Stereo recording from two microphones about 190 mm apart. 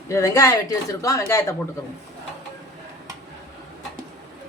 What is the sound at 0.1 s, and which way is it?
Speech, 15° left (ahead or behind).